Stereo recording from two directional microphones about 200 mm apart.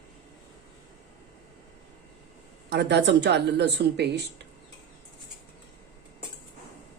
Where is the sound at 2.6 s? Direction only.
55° right (ahead or behind).